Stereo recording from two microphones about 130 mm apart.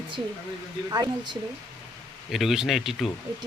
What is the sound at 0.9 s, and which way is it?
Speech, 30° right (ahead or behind).